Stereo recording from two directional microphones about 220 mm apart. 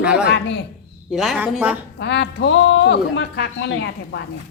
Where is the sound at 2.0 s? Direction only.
50° left (ahead or behind).